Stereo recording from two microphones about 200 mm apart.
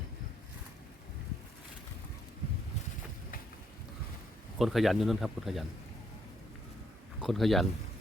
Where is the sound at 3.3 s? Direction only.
45° left (ahead or behind).